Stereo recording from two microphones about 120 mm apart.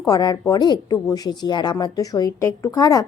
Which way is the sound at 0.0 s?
35° left (ahead or behind).